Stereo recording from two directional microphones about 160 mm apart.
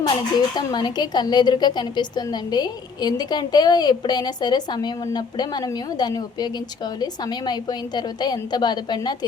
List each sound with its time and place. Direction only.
0.3 s a woman's voice: 25° left (ahead or behind)